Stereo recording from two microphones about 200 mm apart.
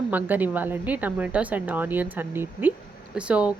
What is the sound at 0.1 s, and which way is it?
A woman's voice, 10° right (ahead or behind).